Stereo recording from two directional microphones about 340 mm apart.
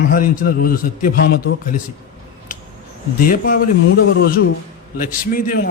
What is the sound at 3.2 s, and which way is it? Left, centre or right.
A man's voice, left.